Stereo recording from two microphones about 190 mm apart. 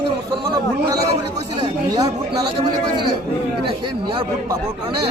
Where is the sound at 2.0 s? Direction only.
20° right (ahead or behind).